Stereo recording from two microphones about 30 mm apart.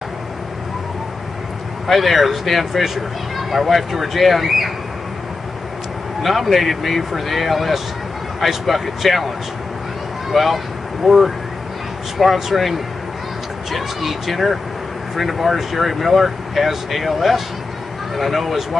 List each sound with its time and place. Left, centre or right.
1.9 s speech: centre
6.2 s speech: centre
10.3 s speech: centre
13.7 s speech: centre